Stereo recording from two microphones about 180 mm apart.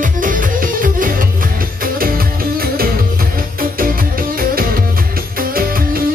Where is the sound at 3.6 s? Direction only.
55° right (ahead or behind).